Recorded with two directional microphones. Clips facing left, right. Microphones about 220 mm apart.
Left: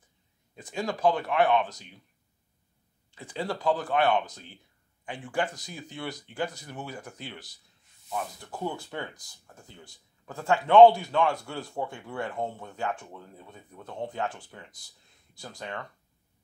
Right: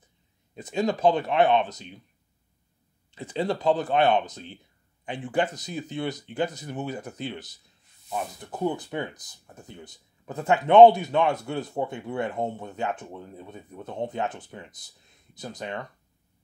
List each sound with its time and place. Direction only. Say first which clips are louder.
0.6 s speech: right 6 dB; 20° right (ahead or behind)
3.1 s speech: right 6 dB; 20° right (ahead or behind)